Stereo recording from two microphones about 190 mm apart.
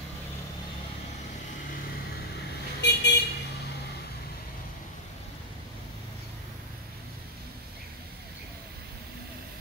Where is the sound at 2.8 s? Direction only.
60° left (ahead or behind).